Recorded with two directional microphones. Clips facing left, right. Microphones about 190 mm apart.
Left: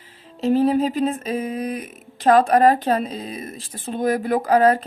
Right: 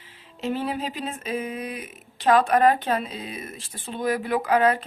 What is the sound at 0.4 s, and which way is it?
Speech, 40° left (ahead or behind).